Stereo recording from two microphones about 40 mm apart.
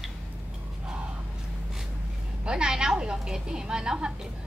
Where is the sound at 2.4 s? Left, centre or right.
Centre.